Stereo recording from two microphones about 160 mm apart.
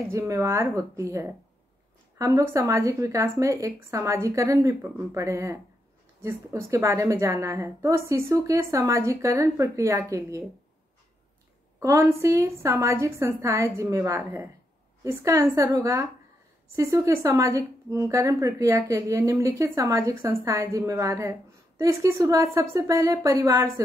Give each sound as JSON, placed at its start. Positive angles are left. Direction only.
{"t": 0.1, "sound": "a woman's voice", "side_deg": -20}
{"t": 11.8, "sound": "a woman's voice", "side_deg": -15}